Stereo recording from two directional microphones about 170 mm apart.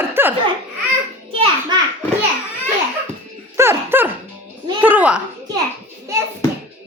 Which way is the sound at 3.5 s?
15° right (ahead or behind).